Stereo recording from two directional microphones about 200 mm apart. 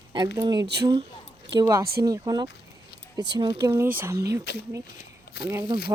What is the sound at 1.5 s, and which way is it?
Speech, 20° right (ahead or behind).